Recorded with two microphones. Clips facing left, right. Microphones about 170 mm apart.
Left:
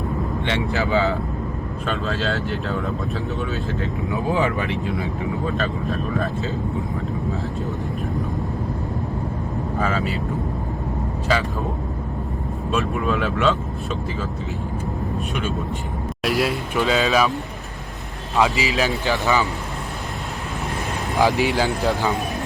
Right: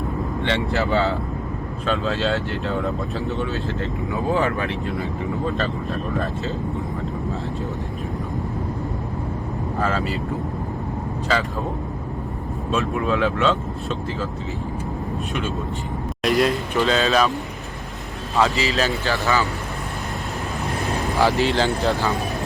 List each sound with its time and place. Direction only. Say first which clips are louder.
0.4 s speech: right 2 dB; 5° left (ahead or behind)
4.1 s speech: even; 15° left (ahead or behind)
6.1 s speech: left 1 dB; centre (ahead or behind)
12.7 s speech: right 1 dB; centre (ahead or behind)
16.2 s speech: right 3 dB; 5° left (ahead or behind)
18.3 s speech: even; 10° left (ahead or behind)
21.2 s speech: left 1 dB; 15° left (ahead or behind)